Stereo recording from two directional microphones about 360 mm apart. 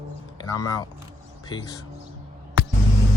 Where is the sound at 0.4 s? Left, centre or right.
Centre.